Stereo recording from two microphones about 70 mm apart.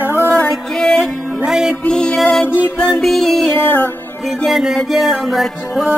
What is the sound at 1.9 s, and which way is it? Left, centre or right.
Music, centre.